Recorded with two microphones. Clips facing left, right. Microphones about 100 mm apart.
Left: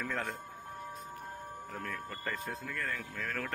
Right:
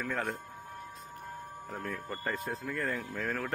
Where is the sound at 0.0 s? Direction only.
10° right (ahead or behind).